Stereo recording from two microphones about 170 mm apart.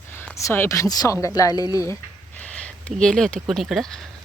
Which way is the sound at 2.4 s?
10° left (ahead or behind).